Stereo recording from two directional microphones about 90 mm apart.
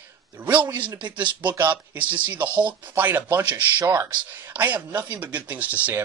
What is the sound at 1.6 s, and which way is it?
Speech, 20° right (ahead or behind).